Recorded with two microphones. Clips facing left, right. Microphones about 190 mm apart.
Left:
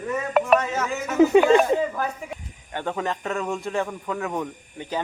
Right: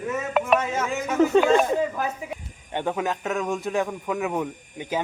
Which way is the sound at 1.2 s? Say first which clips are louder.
Left 3 dB; 15° left (ahead or behind).